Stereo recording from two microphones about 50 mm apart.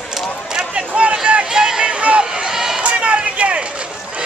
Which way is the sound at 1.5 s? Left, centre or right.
Centre.